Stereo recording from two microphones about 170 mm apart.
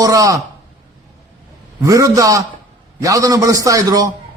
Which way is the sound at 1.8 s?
20° right (ahead or behind).